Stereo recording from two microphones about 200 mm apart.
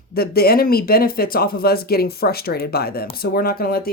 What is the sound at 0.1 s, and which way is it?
Speech, 50° left (ahead or behind).